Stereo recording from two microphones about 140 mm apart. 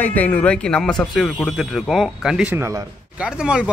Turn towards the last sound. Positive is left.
turn(degrees=-5)  # may be behind; listen again after turning